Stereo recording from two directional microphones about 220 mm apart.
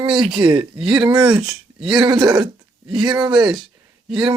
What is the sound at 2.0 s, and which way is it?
Speech, 15° right (ahead or behind).